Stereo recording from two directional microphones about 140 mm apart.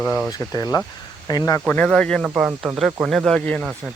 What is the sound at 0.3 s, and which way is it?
Speech, 25° left (ahead or behind).